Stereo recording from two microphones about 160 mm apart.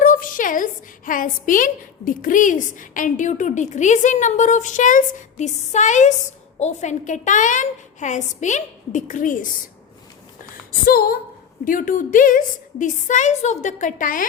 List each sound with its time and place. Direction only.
0.0 s a woman's voice: 55° left (ahead or behind)
10.5 s speech: 65° left (ahead or behind)
11.6 s a woman's voice: 55° left (ahead or behind)